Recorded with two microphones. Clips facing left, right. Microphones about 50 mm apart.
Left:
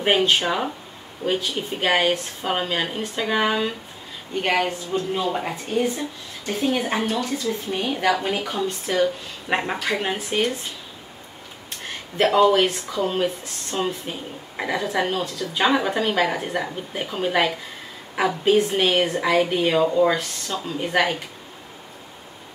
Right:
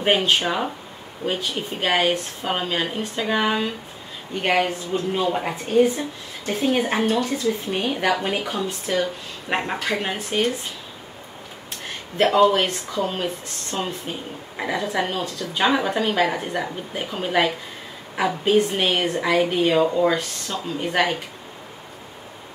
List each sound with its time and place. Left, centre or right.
0.0 s a woman's voice: centre
7.9 s a woman's voice: centre
11.8 s a woman's voice: centre